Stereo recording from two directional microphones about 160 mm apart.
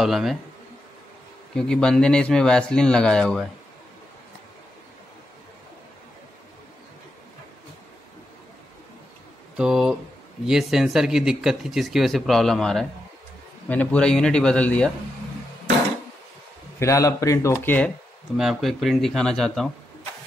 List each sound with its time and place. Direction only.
0.0 s speech: centre (ahead or behind)
1.5 s speech: 5° left (ahead or behind)
9.6 s speech: 5° right (ahead or behind)
16.8 s speech: 20° left (ahead or behind)
18.3 s speech: centre (ahead or behind)